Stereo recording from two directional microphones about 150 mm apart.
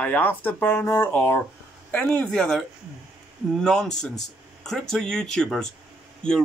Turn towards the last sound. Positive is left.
turn(degrees=5)  # may be behind; listen again after turning